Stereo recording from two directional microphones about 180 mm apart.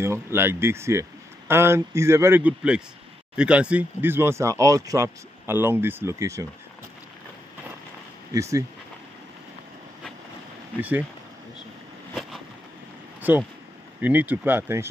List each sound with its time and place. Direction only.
0.0 s speech: 15° right (ahead or behind)
8.3 s speech: 15° right (ahead or behind)
10.8 s speech: 10° right (ahead or behind)
13.2 s speech: 10° right (ahead or behind)